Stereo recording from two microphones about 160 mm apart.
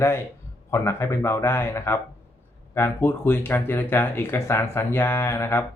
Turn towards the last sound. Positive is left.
turn(degrees=15)  # may be behind; listen again after turning